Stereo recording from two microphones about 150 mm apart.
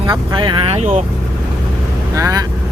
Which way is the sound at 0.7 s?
45° right (ahead or behind).